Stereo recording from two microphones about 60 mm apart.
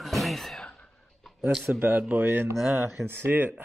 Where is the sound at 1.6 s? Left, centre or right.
Right.